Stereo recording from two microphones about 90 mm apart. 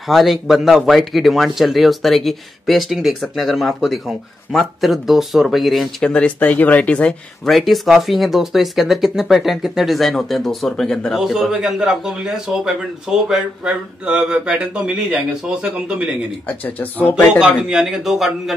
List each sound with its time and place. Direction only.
0.1 s speech: centre (ahead or behind)
6.0 s speech: 15° left (ahead or behind)
7.4 s speech: centre (ahead or behind)
11.2 s speech: 5° right (ahead or behind)
16.4 s speech: 20° left (ahead or behind)
17.1 s speech: 10° right (ahead or behind)